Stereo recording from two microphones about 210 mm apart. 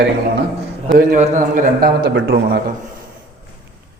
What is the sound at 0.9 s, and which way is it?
A man's voice, 40° right (ahead or behind).